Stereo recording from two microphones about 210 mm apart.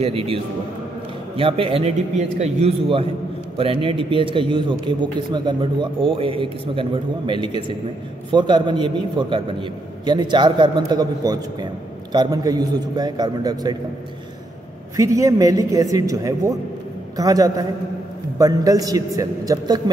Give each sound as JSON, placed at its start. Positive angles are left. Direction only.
{"t": 0.0, "sound": "a man's voice", "side_deg": -25}
{"t": 15.0, "sound": "a man's voice", "side_deg": -15}